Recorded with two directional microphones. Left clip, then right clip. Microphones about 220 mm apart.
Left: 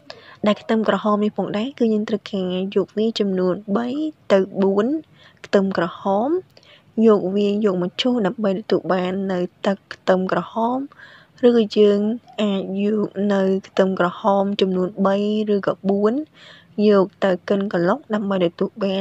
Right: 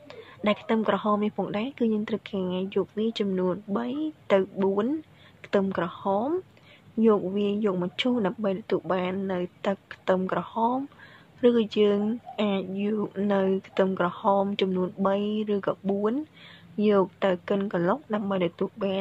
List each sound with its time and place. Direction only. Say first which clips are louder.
0.1 s a woman's voice: left 6 dB; 25° left (ahead or behind)